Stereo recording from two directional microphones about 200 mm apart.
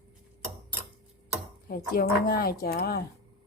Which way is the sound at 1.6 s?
50° left (ahead or behind).